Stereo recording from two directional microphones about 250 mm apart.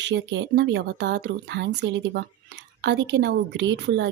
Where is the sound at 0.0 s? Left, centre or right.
Right.